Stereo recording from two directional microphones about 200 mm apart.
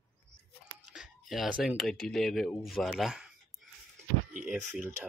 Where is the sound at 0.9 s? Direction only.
Centre (ahead or behind).